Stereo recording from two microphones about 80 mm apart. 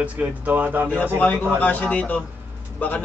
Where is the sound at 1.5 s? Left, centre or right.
Left.